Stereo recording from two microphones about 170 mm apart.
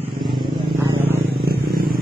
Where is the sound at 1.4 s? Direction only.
60° right (ahead or behind).